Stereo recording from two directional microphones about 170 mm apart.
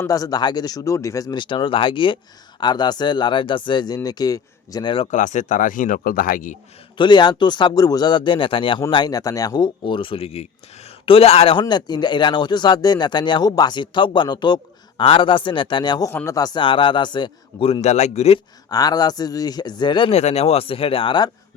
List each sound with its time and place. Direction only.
0.0 s speech: 20° left (ahead or behind)
5.1 s speech: 45° left (ahead or behind)
6.9 s speech: 25° left (ahead or behind)
18.7 s speech: 20° left (ahead or behind)